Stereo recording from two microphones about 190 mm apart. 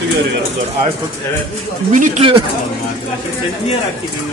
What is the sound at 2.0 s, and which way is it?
Speech, 30° right (ahead or behind).